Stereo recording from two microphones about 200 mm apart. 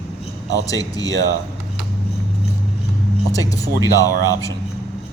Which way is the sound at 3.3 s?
15° left (ahead or behind).